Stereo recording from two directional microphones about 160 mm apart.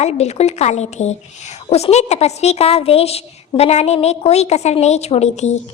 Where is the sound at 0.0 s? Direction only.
45° left (ahead or behind).